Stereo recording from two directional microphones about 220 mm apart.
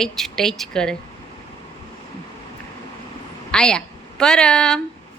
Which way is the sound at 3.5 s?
5° left (ahead or behind).